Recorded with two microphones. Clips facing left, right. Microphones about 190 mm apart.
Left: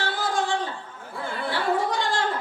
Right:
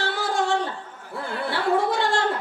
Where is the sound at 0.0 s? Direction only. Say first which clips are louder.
Right 1 dB; 70° right (ahead or behind).